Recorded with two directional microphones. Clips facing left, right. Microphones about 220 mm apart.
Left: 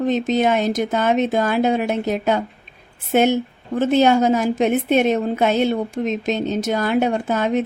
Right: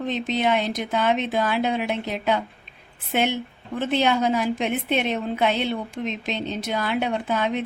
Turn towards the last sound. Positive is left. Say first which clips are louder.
# left 5 dB
turn(degrees=45)  # may be behind; listen again after turning